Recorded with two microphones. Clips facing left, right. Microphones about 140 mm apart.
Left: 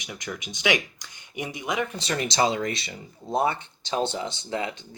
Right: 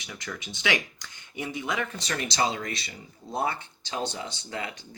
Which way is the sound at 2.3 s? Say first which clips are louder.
Left 4 dB; 25° left (ahead or behind).